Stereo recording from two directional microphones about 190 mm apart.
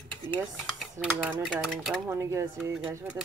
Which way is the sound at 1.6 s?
Centre (ahead or behind).